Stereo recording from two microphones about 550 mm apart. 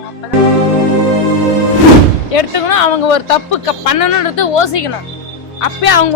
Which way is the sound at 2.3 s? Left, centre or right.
Left.